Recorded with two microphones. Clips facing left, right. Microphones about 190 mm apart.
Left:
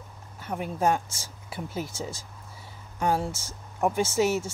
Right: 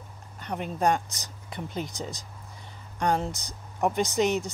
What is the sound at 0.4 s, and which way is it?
Speech, 5° left (ahead or behind).